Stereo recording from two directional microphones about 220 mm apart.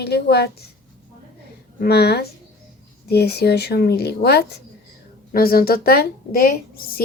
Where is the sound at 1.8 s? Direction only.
45° left (ahead or behind).